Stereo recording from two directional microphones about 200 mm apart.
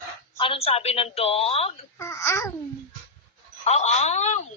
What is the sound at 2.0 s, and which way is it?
Speech, 15° left (ahead or behind).